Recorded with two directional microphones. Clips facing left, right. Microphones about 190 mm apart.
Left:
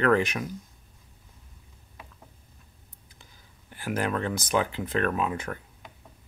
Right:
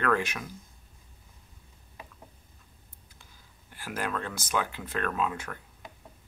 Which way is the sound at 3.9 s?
20° left (ahead or behind).